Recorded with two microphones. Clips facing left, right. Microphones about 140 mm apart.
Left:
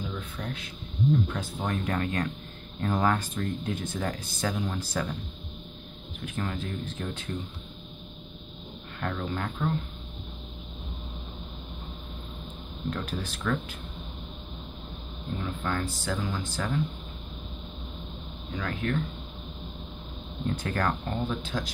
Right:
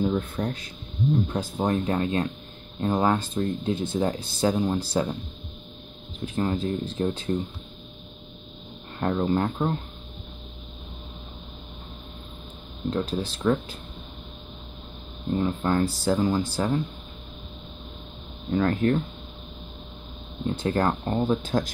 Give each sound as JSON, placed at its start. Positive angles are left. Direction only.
{"t": 0.0, "sound": "speech", "side_deg": -45}
{"t": 6.2, "sound": "speech", "side_deg": -30}
{"t": 9.0, "sound": "speech", "side_deg": -35}
{"t": 12.9, "sound": "speech", "side_deg": -30}
{"t": 15.3, "sound": "speech", "side_deg": -35}
{"t": 18.5, "sound": "speech", "side_deg": -45}
{"t": 20.4, "sound": "speech", "side_deg": -25}